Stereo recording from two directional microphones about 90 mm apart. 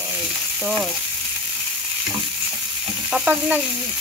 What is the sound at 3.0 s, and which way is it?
Sizzle, 5° right (ahead or behind).